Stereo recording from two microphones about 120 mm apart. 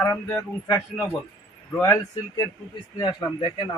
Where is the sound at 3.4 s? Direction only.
45° left (ahead or behind).